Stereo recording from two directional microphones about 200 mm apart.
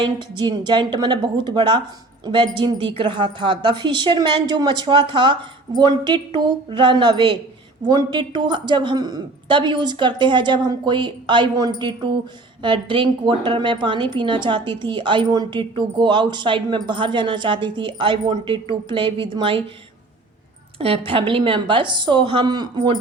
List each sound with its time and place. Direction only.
0.0 s speech: 20° right (ahead or behind)
20.7 s speech: 25° right (ahead or behind)